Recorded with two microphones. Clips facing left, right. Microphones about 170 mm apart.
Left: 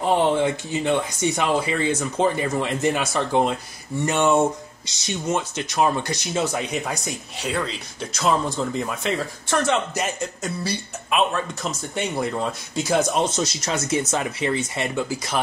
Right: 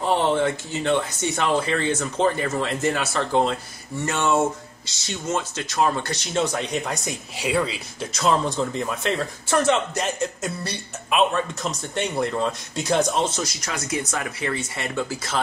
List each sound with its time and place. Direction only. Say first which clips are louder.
0.0 s speech: left 1 dB; 15° left (ahead or behind)
6.3 s speech: right 1 dB; 5° left (ahead or behind)
13.1 s speech: left 2 dB; 20° left (ahead or behind)